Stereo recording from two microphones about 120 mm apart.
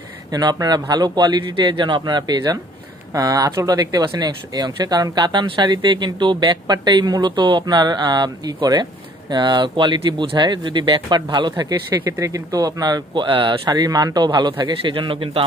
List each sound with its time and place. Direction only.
0.3 s speech: 35° right (ahead or behind)